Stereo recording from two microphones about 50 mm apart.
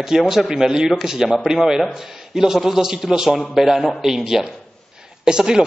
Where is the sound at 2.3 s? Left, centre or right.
Centre.